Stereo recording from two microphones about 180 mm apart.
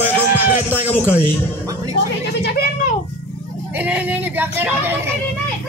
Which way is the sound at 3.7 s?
10° right (ahead or behind).